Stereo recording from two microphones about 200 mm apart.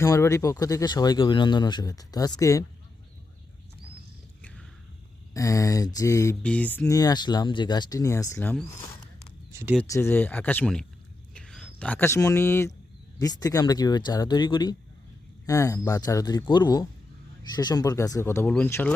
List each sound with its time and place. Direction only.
0.0 s speech: 15° left (ahead or behind)
5.3 s speech: 15° left (ahead or behind)
9.5 s a sound: 15° right (ahead or behind)
9.8 s speech: 15° left (ahead or behind)